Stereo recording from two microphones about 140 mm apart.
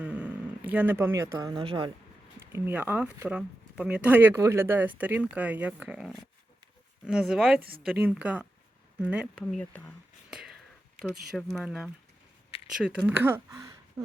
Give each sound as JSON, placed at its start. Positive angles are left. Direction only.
{"t": 0.0, "sound": "speech", "side_deg": -10}
{"t": 2.5, "sound": "speech", "side_deg": -15}
{"t": 9.3, "sound": "speech", "side_deg": 5}
{"t": 10.2, "sound": "whispering", "side_deg": -5}
{"t": 11.0, "sound": "speech", "side_deg": 0}
{"t": 12.5, "sound": "a sound", "side_deg": 45}
{"t": 13.1, "sound": "speech", "side_deg": -15}